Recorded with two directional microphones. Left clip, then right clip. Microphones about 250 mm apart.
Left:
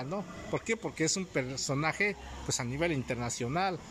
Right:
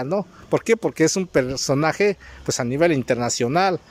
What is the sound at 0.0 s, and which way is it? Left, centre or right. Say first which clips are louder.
Speech: right 13 dB; right.